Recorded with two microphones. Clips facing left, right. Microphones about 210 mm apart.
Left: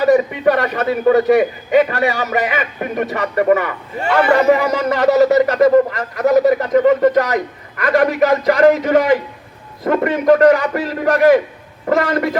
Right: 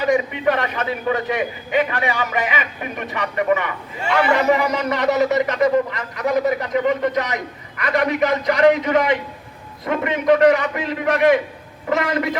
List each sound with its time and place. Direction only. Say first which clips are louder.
0.0 s a man's voice: left 6 dB; 40° left (ahead or behind)